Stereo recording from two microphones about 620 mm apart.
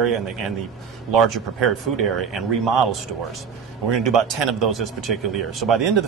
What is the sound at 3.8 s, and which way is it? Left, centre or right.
Speech, right.